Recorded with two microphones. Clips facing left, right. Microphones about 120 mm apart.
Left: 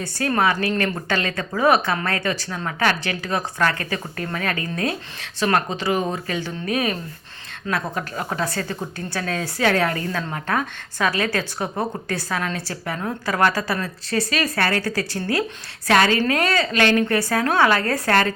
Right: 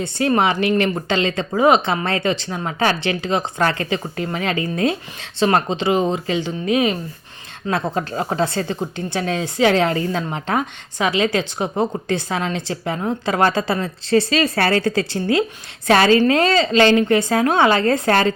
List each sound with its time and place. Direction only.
0.0 s speech: 20° right (ahead or behind)